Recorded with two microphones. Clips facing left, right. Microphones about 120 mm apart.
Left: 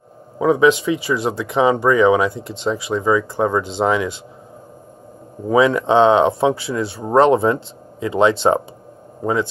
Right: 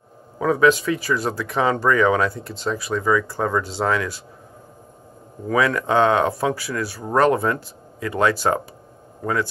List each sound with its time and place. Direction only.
0.4 s speech: 15° left (ahead or behind)
5.5 s speech: 20° left (ahead or behind)